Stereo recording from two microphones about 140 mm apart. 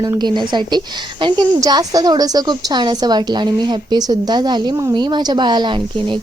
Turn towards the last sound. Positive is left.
turn(degrees=-30)  # may be behind; listen again after turning